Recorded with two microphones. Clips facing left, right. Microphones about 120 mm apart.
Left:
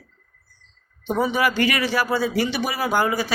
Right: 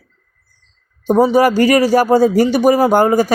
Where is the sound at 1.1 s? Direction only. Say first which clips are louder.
Right 10 dB; 40° right (ahead or behind).